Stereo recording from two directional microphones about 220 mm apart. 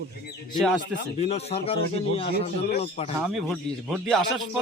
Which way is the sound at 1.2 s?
30° left (ahead or behind).